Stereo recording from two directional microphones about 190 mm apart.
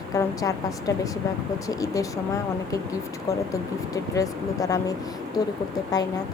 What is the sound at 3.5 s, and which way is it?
A woman's voice, 20° left (ahead or behind).